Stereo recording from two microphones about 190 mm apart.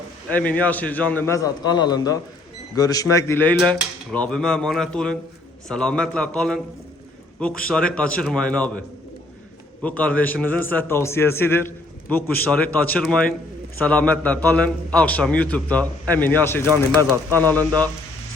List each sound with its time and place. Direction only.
0.3 s a man's voice: 10° left (ahead or behind)
7.7 s speech: 5° left (ahead or behind)
9.8 s a man's voice: 5° left (ahead or behind)
17.0 s speech: 15° right (ahead or behind)